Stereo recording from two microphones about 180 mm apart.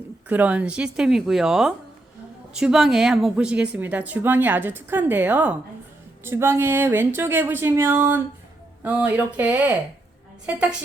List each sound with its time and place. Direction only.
0.3 s a woman's voice: 10° right (ahead or behind)